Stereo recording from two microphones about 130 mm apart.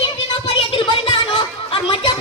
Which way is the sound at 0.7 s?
40° left (ahead or behind).